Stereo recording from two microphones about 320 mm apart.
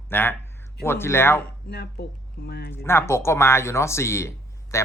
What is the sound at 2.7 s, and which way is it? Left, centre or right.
Speech, centre.